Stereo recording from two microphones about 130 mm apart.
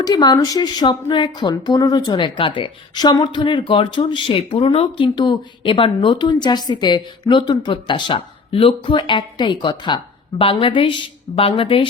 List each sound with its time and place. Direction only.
0.0 s speech: 30° left (ahead or behind)